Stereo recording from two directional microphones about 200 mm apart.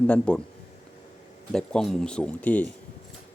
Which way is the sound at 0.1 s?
5° left (ahead or behind).